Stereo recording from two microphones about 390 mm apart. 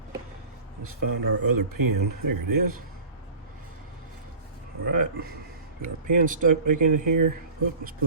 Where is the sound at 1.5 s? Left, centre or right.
Right.